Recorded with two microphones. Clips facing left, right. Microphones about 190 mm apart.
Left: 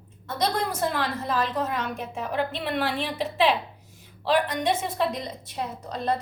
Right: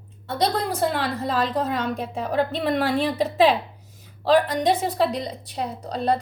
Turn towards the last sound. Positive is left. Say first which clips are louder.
# right 4 dB
turn(degrees=-35)  # may be behind; listen again after turning